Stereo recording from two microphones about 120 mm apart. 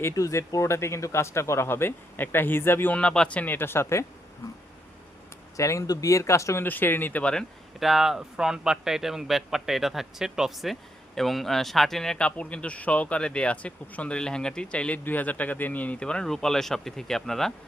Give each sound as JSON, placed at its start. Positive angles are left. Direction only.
{"t": 0.0, "sound": "speech", "side_deg": 25}
{"t": 5.5, "sound": "speech", "side_deg": 25}
{"t": 7.8, "sound": "speech", "side_deg": 0}